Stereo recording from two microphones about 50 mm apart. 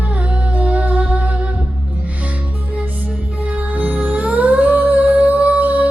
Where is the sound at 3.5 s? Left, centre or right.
Right.